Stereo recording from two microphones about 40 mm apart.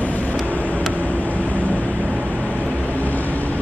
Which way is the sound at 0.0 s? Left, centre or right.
Left.